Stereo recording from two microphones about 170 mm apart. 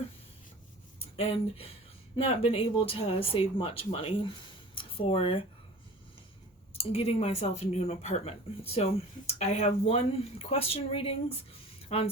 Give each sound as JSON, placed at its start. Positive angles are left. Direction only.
{"t": 1.1, "sound": "speech", "side_deg": 35}
{"t": 4.7, "sound": "a sound", "side_deg": 30}
{"t": 6.7, "sound": "speech", "side_deg": 35}